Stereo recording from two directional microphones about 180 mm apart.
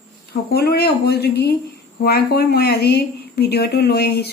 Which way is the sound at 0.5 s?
60° left (ahead or behind).